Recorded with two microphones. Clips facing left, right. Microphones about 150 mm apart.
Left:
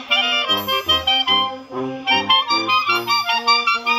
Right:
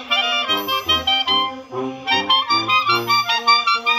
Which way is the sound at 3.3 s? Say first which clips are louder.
Right 1 dB; 5° left (ahead or behind).